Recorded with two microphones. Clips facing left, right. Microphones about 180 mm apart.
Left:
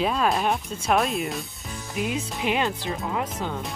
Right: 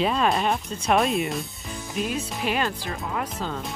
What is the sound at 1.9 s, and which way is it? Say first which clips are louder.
Speech: even; 15° left (ahead or behind).